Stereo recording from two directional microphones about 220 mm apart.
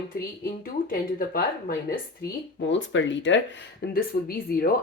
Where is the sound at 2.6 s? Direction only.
55° left (ahead or behind).